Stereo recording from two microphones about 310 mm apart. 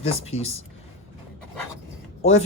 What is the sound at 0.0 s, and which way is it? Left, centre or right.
Speech, centre.